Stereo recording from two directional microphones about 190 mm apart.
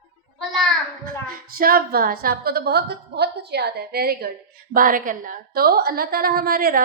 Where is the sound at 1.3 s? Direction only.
50° right (ahead or behind).